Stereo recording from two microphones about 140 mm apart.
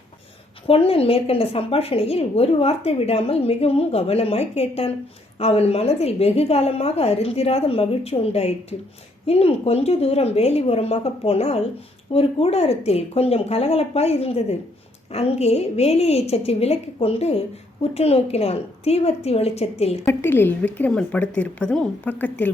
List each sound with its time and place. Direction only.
0.7 s a woman's voice: 45° left (ahead or behind)
20.1 s a woman's voice: 15° left (ahead or behind)